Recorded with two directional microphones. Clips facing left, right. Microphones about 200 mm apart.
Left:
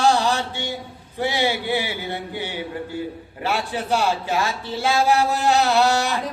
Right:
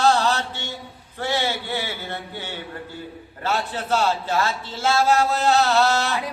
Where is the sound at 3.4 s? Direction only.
15° left (ahead or behind).